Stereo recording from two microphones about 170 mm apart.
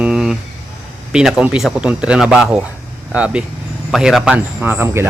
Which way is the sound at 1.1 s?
5° right (ahead or behind).